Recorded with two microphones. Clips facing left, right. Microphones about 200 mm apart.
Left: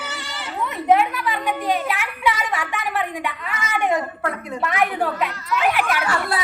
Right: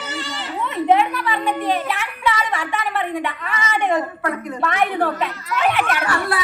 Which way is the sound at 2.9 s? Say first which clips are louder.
Right 2 dB; 5° left (ahead or behind).